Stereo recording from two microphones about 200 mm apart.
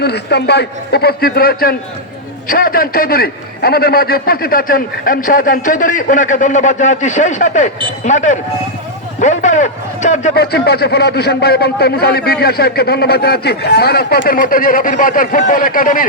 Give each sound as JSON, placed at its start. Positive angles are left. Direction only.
{"t": 0.0, "sound": "a man's voice", "side_deg": 55}
{"t": 10.3, "sound": "speech", "side_deg": 50}